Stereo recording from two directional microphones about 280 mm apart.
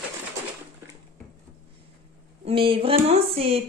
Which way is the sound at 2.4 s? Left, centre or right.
Centre.